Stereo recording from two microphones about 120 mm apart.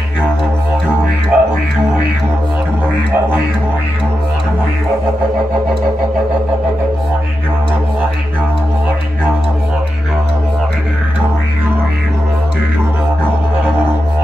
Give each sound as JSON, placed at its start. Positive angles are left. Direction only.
{"t": 1.3, "sound": "music", "side_deg": -10}